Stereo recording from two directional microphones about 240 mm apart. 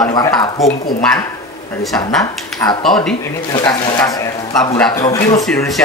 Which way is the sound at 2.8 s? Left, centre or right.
Centre.